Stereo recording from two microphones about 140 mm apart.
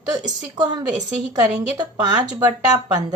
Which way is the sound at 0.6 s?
30° right (ahead or behind).